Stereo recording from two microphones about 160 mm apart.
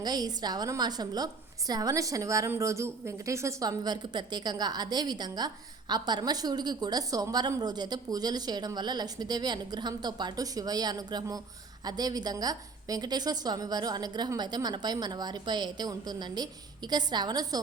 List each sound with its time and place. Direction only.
0.0 s a woman's voice: 25° right (ahead or behind)